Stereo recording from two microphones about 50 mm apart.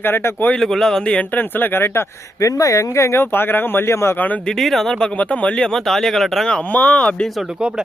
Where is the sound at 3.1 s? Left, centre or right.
Left.